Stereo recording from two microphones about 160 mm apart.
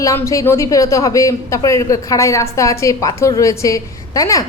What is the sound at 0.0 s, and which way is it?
A woman's voice, 20° left (ahead or behind).